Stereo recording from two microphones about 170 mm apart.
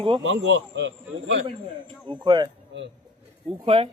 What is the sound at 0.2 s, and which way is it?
Speech, 90° right.